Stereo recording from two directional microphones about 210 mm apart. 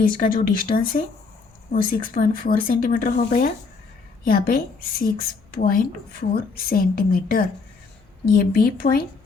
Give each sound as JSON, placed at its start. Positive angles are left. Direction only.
{"t": 0.0, "sound": "a woman's voice", "side_deg": 40}